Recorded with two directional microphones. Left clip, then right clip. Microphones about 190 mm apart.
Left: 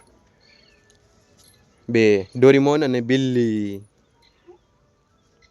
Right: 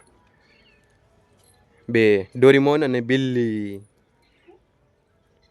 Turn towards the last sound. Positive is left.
turn(degrees=5)  # may be behind; listen again after turning